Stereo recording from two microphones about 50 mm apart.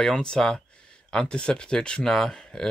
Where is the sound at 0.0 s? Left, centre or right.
Centre.